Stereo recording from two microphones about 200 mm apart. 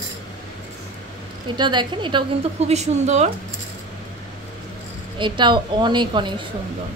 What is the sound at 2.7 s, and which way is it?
Speech, 35° right (ahead or behind).